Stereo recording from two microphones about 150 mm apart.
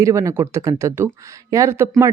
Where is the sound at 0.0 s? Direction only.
20° right (ahead or behind).